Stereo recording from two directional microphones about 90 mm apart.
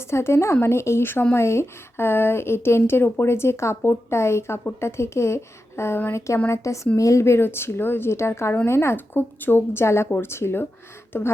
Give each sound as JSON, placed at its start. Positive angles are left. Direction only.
{"t": 0.1, "sound": "speech", "side_deg": 30}